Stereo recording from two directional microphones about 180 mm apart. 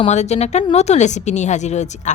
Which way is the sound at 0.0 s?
40° left (ahead or behind).